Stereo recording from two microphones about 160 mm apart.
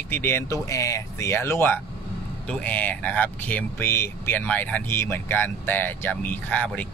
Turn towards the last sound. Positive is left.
turn(degrees=10)  # may be behind; listen again after turning